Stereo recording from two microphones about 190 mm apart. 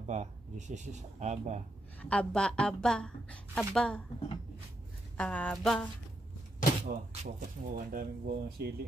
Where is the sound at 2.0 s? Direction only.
5° left (ahead or behind).